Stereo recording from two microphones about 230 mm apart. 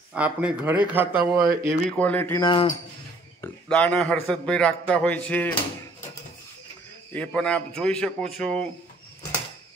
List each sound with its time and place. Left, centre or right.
0.1 s speech: centre
1.7 s speech: centre
2.4 s speech: centre
3.3 s a man's voice: centre
7.2 s a man's voice: centre